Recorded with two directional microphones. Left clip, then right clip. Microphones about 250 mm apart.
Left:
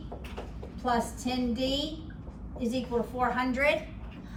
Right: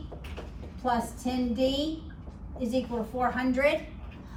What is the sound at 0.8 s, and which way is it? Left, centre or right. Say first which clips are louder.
A woman's voice: even; centre.